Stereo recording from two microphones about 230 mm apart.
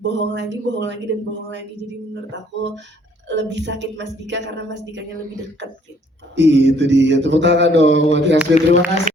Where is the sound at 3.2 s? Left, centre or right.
Right.